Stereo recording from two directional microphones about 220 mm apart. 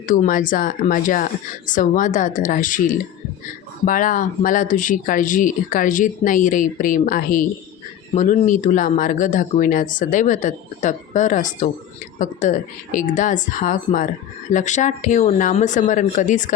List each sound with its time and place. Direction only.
0.1 s speech: 40° left (ahead or behind)